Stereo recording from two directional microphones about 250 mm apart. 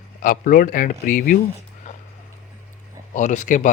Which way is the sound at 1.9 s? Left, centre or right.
Left.